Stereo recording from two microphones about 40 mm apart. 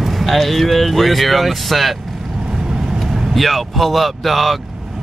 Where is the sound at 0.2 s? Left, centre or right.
Centre.